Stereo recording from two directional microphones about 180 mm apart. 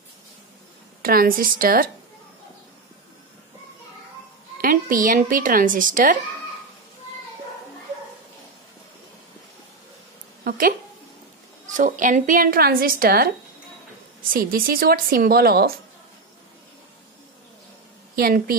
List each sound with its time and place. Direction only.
1.0 s speech: 55° right (ahead or behind)
4.6 s speech: 50° right (ahead or behind)
11.7 s speech: 45° right (ahead or behind)
18.1 s speech: 55° right (ahead or behind)